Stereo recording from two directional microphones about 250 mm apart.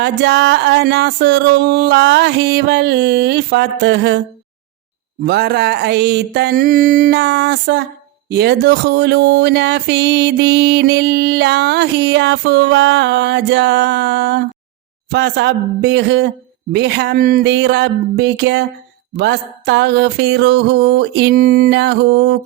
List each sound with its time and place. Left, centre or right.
0.0 s speech: right
5.2 s a sound: right
8.3 s speech: right